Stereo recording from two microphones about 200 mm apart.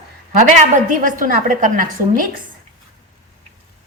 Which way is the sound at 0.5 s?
40° right (ahead or behind).